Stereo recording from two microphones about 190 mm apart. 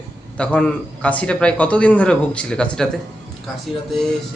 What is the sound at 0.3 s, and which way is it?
A man's voice, 5° left (ahead or behind).